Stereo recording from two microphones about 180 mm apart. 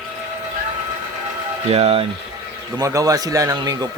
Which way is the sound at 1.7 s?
35° right (ahead or behind).